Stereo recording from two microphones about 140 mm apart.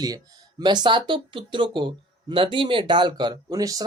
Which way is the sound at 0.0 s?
25° right (ahead or behind).